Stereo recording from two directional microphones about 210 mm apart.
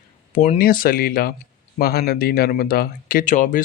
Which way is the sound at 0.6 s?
45° left (ahead or behind).